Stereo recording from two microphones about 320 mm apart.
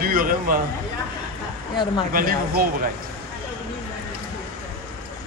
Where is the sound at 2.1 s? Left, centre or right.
Right.